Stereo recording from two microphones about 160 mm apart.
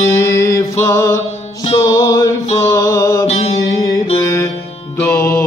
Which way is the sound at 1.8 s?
25° left (ahead or behind).